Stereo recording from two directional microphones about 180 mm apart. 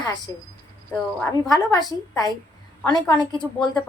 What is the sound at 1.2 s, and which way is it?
A woman's voice, 20° left (ahead or behind).